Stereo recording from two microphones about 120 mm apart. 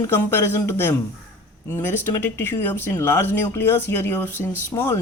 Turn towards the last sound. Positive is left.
turn(degrees=20)  # may be behind; listen again after turning